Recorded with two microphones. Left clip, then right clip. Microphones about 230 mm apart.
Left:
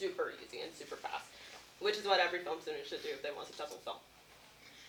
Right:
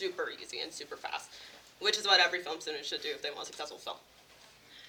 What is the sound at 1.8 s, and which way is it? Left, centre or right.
Speech, right.